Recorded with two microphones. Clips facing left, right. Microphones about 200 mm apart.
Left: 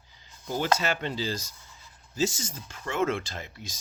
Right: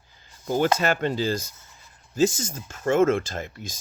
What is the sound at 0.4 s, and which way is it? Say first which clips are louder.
Speech: right 5 dB; 50° right (ahead or behind).